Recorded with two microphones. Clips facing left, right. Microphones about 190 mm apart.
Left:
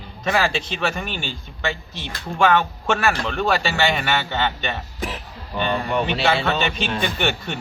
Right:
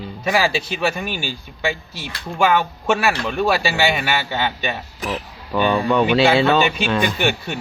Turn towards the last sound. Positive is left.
turn(degrees=-10)  # may be behind; listen again after turning